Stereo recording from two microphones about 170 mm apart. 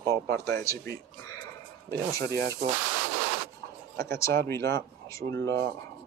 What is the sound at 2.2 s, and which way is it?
Speech, 70° right (ahead or behind).